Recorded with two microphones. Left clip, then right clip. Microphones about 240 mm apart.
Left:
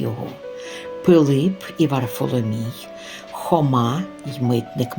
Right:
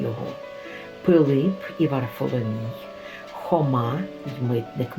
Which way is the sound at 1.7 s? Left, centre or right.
Left.